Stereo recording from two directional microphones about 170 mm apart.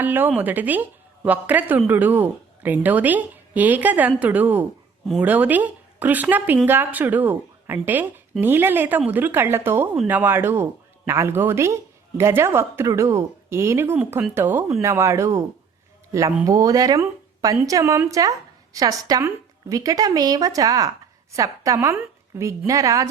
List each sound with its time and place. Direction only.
0.0 s a woman's voice: 10° right (ahead or behind)